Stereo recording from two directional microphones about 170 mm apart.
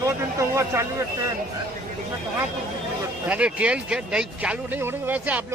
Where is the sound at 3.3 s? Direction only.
5° right (ahead or behind).